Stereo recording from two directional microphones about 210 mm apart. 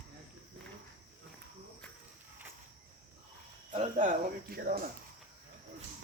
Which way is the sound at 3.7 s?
35° right (ahead or behind).